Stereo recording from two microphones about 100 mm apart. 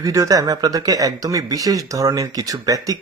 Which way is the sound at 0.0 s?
35° right (ahead or behind).